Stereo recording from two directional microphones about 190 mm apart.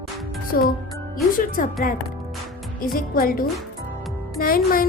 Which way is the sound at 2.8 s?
50° left (ahead or behind).